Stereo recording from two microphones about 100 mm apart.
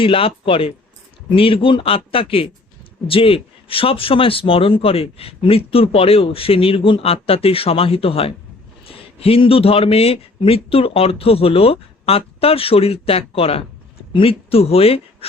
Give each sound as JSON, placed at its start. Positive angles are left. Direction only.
{"t": 0.0, "sound": "speech", "side_deg": 65}